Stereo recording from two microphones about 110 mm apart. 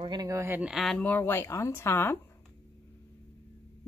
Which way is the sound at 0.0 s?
40° right (ahead or behind).